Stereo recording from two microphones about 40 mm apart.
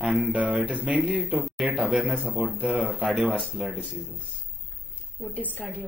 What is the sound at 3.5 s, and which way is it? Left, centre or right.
Speech, centre.